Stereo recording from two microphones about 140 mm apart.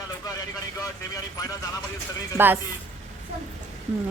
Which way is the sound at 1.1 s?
25° left (ahead or behind).